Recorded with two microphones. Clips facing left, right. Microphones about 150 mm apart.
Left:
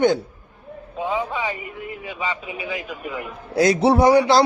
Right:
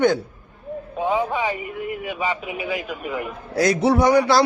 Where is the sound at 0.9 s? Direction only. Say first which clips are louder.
Right 3 dB; 20° right (ahead or behind).